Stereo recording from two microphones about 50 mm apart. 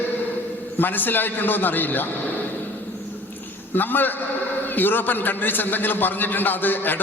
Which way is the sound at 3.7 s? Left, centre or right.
Left.